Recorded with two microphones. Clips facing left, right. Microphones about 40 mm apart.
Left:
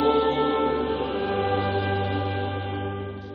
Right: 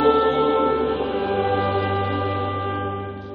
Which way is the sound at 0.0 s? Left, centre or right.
Centre.